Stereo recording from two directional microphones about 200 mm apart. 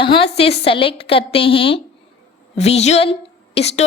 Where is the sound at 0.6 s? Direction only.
25° left (ahead or behind).